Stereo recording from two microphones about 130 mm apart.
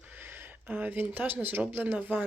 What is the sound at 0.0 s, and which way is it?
Speech, 15° right (ahead or behind).